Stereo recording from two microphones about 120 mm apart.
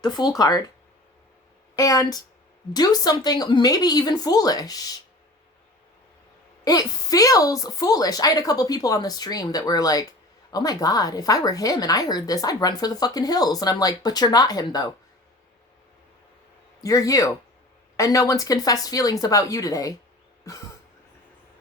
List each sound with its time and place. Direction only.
0.0 s a woman's voice: 35° left (ahead or behind)
1.7 s a woman's voice: 30° left (ahead or behind)
6.7 s a woman's voice: 30° left (ahead or behind)
16.8 s speech: 30° left (ahead or behind)